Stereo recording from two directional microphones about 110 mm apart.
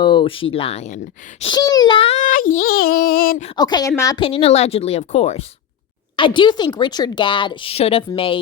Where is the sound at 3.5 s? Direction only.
40° left (ahead or behind).